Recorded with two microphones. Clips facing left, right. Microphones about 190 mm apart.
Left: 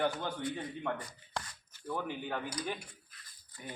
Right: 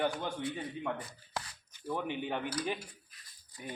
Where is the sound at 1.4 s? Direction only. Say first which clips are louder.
Even; 5° right (ahead or behind).